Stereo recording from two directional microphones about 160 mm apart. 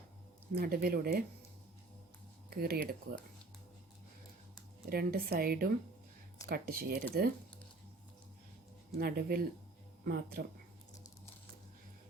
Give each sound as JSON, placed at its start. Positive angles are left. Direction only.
{"t": 0.5, "sound": "speech", "side_deg": -70}
{"t": 2.5, "sound": "speech", "side_deg": -75}
{"t": 4.9, "sound": "speech", "side_deg": -70}
{"t": 9.0, "sound": "speech", "side_deg": -75}